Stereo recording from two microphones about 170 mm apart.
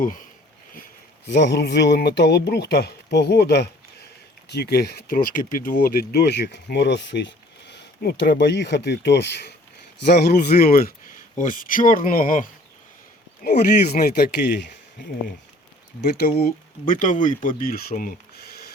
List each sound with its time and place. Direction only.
1.3 s speech: 90° left
10.6 s speech: 60° left (ahead or behind); by 14.7 s 90° left
16.0 s speech: 70° left (ahead or behind)
16.4 s speech: 55° left (ahead or behind)